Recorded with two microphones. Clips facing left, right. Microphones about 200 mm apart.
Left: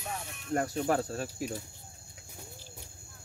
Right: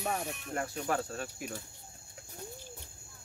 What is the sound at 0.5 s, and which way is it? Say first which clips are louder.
Speech: left 5 dB; 40° left (ahead or behind).